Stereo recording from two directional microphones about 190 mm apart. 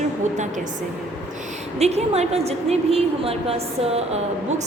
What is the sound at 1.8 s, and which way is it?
A woman's voice, 35° right (ahead or behind).